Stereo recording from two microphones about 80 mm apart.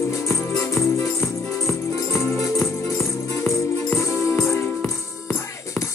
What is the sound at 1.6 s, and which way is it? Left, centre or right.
Music, left.